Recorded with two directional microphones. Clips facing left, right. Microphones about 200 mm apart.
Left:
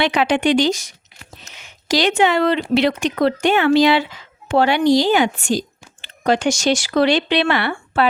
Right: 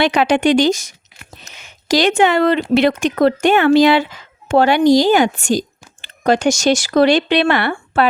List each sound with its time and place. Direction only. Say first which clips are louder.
0.0 s speech: right 3 dB; 40° right (ahead or behind)